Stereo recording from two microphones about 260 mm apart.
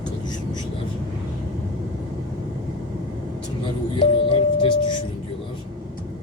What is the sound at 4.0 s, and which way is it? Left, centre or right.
Music, centre.